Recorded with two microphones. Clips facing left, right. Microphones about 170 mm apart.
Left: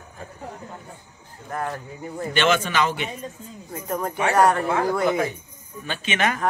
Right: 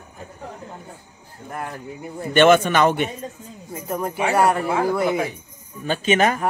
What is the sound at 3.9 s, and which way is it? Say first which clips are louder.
Speech: right 1 dB; 10° right (ahead or behind).